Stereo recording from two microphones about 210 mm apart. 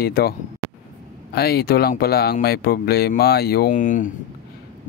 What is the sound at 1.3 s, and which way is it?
Speech, 50° left (ahead or behind).